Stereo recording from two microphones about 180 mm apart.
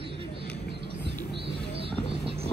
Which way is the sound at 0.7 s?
70° right (ahead or behind).